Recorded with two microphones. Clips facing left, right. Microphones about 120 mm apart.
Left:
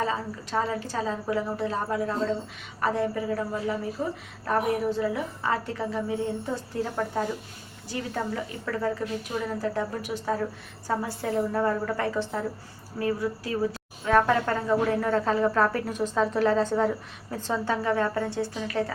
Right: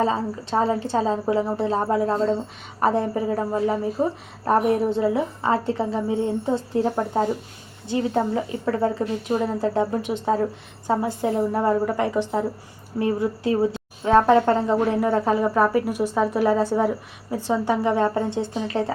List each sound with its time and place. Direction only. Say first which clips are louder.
0.0 s a woman's voice: right 6 dB; 30° right (ahead or behind)
11.0 s a woman's voice: right 5 dB; 20° right (ahead or behind)